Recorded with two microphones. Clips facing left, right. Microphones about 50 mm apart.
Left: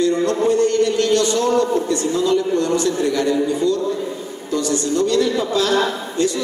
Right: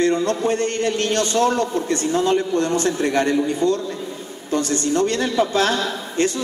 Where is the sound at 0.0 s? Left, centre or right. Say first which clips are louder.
Left 2 dB; right.